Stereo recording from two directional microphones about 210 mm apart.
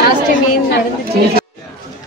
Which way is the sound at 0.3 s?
50° left (ahead or behind).